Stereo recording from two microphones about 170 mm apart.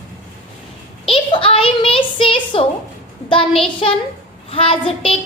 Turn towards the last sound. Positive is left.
turn(degrees=35)  # may be behind; listen again after turning